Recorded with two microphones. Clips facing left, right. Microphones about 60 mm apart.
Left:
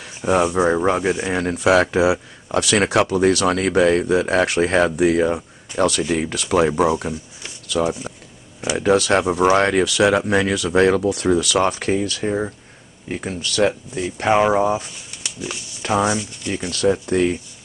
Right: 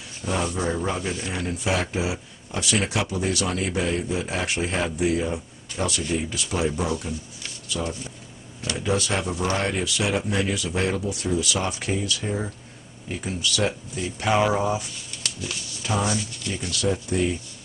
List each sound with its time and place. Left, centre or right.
0.2 s speech: left
1.2 s speech: left
7.6 s speech: left
8.7 s speech: left
15.9 s speech: left
17.0 s speech: left